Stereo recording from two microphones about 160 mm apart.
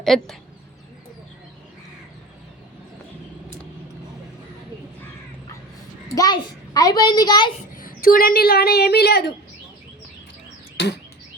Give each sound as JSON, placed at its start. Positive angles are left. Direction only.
{"t": 0.0, "sound": "speech", "side_deg": 0}
{"t": 6.1, "sound": "a child's voice", "side_deg": 25}
{"t": 7.8, "sound": "a woman's voice", "side_deg": 65}
{"t": 10.8, "sound": "a sound", "side_deg": 90}